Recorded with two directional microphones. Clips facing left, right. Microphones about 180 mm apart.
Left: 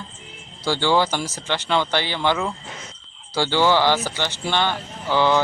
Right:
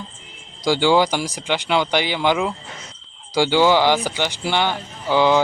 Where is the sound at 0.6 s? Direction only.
15° right (ahead or behind).